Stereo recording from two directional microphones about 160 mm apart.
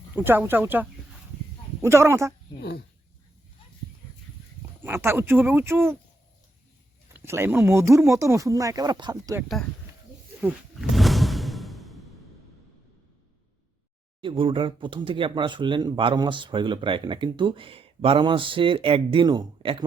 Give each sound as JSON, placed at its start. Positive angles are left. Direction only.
{"t": 0.1, "sound": "speech", "side_deg": -15}
{"t": 2.6, "sound": "speech", "side_deg": 90}
{"t": 4.8, "sound": "speech", "side_deg": -15}
{"t": 7.1, "sound": "speech", "side_deg": -15}
{"t": 10.4, "sound": "music", "side_deg": 0}
{"t": 14.2, "sound": "speech", "side_deg": -30}